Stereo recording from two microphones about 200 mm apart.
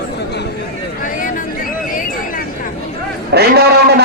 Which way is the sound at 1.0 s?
40° left (ahead or behind).